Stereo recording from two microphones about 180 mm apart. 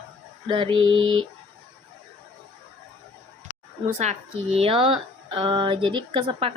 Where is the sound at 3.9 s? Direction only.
40° right (ahead or behind).